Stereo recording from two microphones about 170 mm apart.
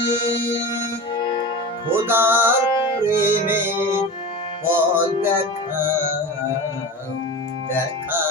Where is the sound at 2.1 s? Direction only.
15° right (ahead or behind).